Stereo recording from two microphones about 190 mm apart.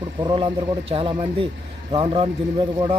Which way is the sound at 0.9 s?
30° right (ahead or behind).